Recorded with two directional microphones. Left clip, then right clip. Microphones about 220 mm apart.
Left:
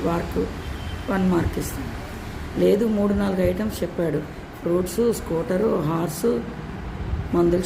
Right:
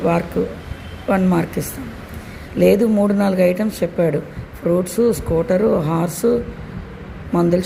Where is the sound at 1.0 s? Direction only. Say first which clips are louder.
Right 5 dB; 30° right (ahead or behind).